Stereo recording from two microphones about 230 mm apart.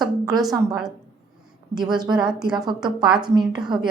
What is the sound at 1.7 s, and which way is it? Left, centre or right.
Speech, centre.